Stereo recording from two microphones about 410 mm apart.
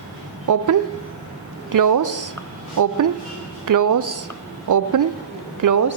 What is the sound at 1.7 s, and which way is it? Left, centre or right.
A woman's voice, right.